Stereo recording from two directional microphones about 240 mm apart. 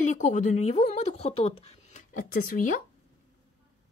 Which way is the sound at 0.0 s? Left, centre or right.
Left.